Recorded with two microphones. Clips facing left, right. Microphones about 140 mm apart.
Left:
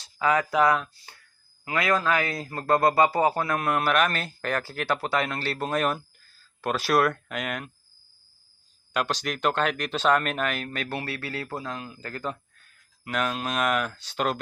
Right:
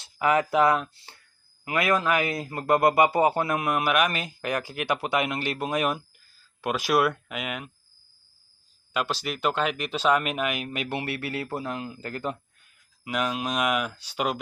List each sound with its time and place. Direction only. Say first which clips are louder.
0.0 s speech: right 1 dB; 25° right (ahead or behind); by 7.7 s 5° right (ahead or behind)
8.9 s speech: left 1 dB; 5° right (ahead or behind)